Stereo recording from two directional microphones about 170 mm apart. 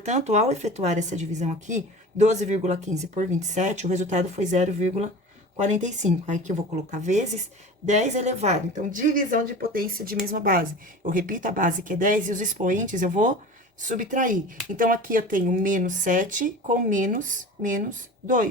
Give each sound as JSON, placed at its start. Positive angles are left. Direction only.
{"t": 0.0, "sound": "a woman's voice", "side_deg": -45}